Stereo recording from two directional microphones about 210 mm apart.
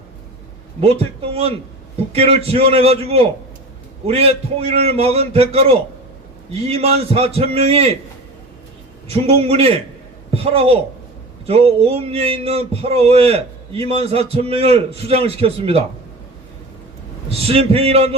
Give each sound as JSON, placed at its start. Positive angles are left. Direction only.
{"t": 0.8, "sound": "speech", "side_deg": -30}
{"t": 9.0, "sound": "speech", "side_deg": -30}
{"t": 17.2, "sound": "speech", "side_deg": -30}